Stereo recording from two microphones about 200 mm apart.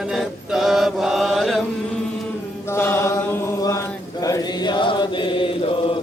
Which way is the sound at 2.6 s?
10° left (ahead or behind).